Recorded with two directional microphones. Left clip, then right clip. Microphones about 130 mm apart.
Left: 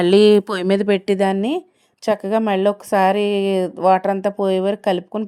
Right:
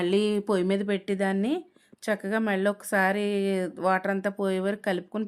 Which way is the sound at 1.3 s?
45° left (ahead or behind).